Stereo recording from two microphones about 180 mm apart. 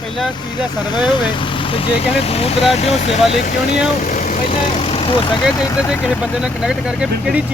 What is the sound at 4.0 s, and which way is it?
Vehicle, 45° left (ahead or behind).